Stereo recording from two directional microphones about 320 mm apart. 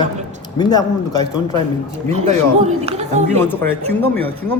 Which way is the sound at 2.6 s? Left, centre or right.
Centre.